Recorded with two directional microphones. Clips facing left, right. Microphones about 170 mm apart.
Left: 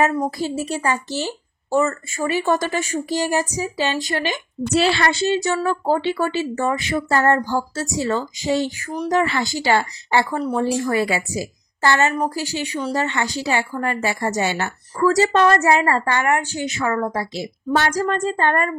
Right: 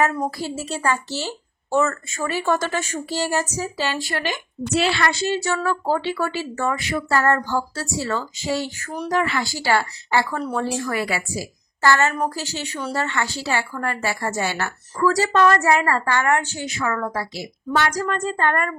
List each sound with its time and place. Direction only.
0.4 s a woman's voice: 15° left (ahead or behind)
4.7 s speech: 30° left (ahead or behind)
5.3 s speech: 20° left (ahead or behind)
9.1 s a woman's voice: 25° left (ahead or behind)